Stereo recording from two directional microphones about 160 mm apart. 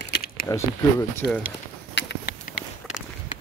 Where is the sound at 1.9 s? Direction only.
90° left.